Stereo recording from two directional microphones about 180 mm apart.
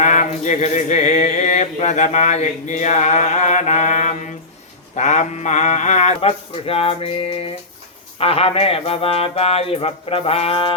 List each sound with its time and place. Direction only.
0.0 s mantra: 40° left (ahead or behind)